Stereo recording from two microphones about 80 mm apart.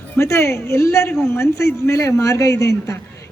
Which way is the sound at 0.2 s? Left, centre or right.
Left.